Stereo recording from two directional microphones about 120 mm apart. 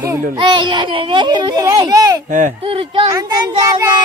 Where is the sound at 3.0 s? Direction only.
30° right (ahead or behind).